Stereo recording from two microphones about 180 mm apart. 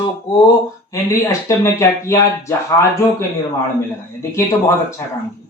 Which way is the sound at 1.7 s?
15° left (ahead or behind).